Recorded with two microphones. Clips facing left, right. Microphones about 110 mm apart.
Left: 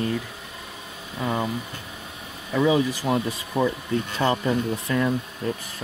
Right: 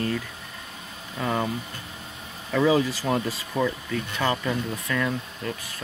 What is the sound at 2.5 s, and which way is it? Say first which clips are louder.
Speech: even; 15° left (ahead or behind).